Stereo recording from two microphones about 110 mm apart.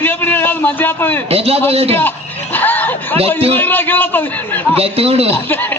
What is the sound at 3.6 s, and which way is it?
A man's voice, 15° left (ahead or behind).